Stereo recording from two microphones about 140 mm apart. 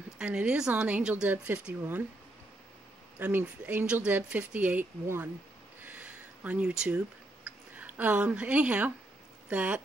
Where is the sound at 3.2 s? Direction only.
10° right (ahead or behind).